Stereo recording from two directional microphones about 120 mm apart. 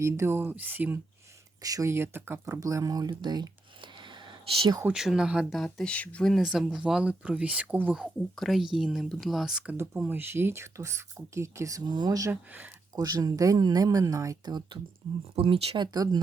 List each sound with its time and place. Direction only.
0.0 s speech: 20° right (ahead or behind)
1.6 s speech: 25° right (ahead or behind)
4.9 s speech: 5° right (ahead or behind)
8.0 s speech: centre (ahead or behind)
9.7 s speech: 20° right (ahead or behind)
12.3 s speech: 15° right (ahead or behind)
13.0 s speech: 30° right (ahead or behind)
15.4 s speech: 50° right (ahead or behind); by 16.2 s 35° right (ahead or behind)